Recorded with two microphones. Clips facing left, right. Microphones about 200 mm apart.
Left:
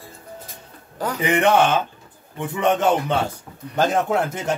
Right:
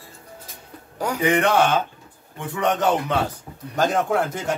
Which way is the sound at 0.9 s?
10° right (ahead or behind).